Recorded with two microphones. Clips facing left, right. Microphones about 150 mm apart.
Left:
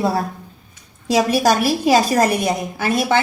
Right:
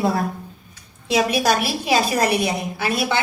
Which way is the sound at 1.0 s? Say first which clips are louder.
Left 3 dB; 40° left (ahead or behind).